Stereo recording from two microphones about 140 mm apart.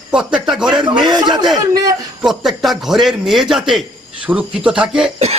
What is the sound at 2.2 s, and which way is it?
A man's voice, 5° right (ahead or behind).